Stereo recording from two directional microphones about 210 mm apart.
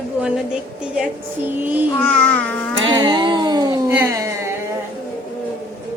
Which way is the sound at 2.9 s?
20° right (ahead or behind).